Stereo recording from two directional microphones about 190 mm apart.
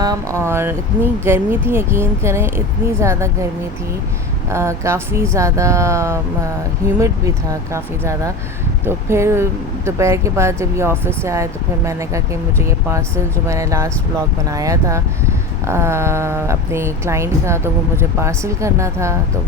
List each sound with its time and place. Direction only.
0.0 s speech: 20° right (ahead or behind)
4.4 s speech: 15° right (ahead or behind)